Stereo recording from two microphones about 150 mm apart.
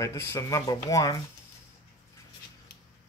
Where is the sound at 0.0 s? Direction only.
20° left (ahead or behind).